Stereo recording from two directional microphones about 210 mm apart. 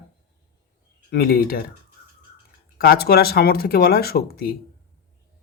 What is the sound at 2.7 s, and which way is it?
Speech, 45° left (ahead or behind).